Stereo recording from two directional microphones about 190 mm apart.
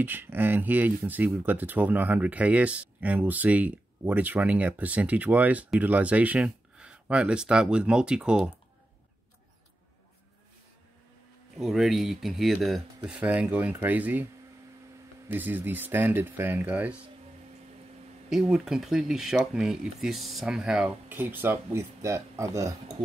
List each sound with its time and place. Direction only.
0.0 s speech: 10° right (ahead or behind)
11.5 s speech: centre (ahead or behind)
15.2 s speech: 10° right (ahead or behind)
18.3 s speech: centre (ahead or behind)